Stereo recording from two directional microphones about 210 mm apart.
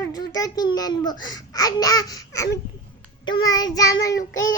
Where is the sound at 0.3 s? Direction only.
20° left (ahead or behind).